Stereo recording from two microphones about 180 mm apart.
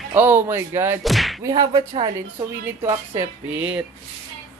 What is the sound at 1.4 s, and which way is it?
Speech, 20° right (ahead or behind).